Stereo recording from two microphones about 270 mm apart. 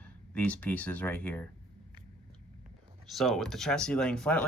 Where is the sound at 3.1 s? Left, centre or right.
Centre.